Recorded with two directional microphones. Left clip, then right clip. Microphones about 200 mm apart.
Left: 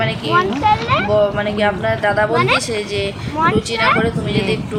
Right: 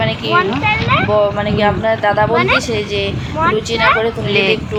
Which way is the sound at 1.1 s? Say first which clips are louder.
Right 2 dB; centre (ahead or behind).